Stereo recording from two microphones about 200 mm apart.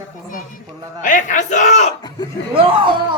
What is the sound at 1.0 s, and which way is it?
Speech, 40° left (ahead or behind).